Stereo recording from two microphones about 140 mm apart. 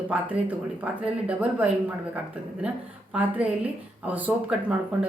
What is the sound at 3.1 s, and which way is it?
A woman's voice, 10° right (ahead or behind).